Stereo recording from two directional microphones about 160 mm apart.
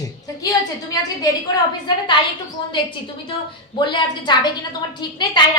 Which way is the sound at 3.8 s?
30° left (ahead or behind).